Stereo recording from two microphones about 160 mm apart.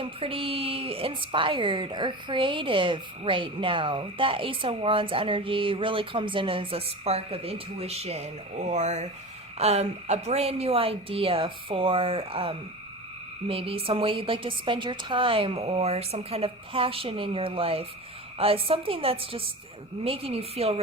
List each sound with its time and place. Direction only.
0.0 s a woman's voice: 35° right (ahead or behind)